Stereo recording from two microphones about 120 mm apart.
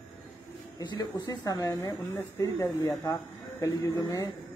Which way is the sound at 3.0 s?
25° left (ahead or behind).